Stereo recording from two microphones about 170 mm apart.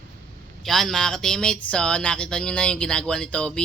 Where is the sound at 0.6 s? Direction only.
Centre (ahead or behind).